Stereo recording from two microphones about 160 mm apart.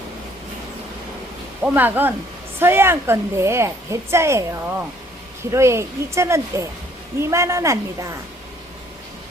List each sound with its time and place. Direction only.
1.6 s a woman's voice: 10° right (ahead or behind)